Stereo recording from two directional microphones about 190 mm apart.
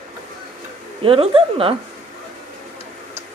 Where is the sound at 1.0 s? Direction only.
30° right (ahead or behind).